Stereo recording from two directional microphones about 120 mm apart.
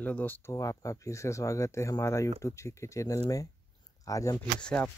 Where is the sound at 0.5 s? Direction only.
30° left (ahead or behind).